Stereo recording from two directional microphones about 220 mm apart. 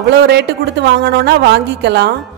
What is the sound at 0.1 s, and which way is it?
A woman's voice, 50° right (ahead or behind).